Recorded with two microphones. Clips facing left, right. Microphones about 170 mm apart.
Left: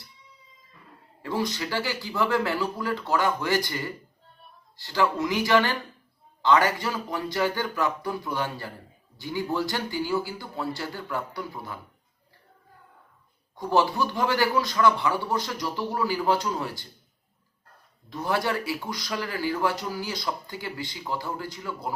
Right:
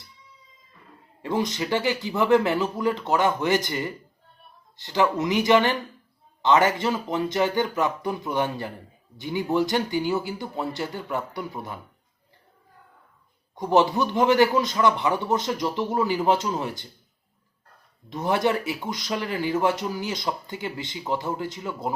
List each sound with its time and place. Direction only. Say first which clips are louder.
1.2 s speech: right 3 dB; 20° right (ahead or behind)
13.6 s speech: right 3 dB; 20° right (ahead or behind)
18.1 s speech: right 4 dB; 20° right (ahead or behind)